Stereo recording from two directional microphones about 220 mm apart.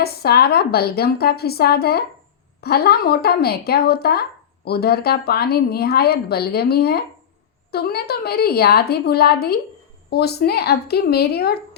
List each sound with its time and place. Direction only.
0.0 s speech: 45° left (ahead or behind)